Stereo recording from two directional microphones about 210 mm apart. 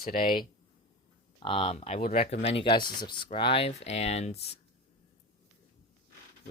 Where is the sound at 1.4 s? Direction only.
25° left (ahead or behind).